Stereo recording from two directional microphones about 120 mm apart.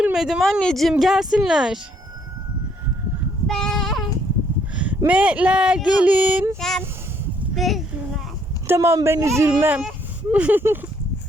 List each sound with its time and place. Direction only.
0.0 s speech: 5° right (ahead or behind)
3.4 s child singing: 5° left (ahead or behind)
4.7 s a sound: 10° right (ahead or behind)
5.0 s speech: 10° right (ahead or behind)
6.6 s a child's voice: 5° left (ahead or behind)
8.6 s speech: 20° right (ahead or behind)
10.3 s speech: 15° right (ahead or behind)